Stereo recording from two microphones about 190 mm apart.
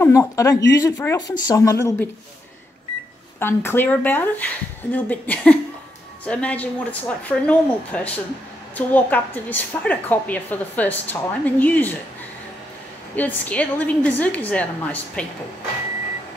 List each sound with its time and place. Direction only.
0.0 s a woman's voice: 15° left (ahead or behind)
3.3 s a woman's voice: 10° left (ahead or behind)
13.1 s a woman's voice: 10° left (ahead or behind)